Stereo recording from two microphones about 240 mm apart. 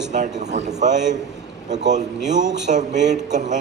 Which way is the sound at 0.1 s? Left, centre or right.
Right.